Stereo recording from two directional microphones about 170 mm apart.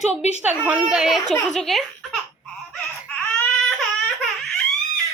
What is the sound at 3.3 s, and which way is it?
Baby cry, 5° left (ahead or behind).